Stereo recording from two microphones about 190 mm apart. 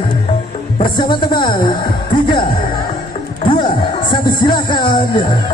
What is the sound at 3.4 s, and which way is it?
Music, 25° left (ahead or behind).